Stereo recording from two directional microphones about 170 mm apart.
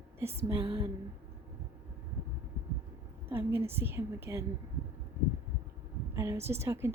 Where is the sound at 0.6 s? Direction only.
30° right (ahead or behind).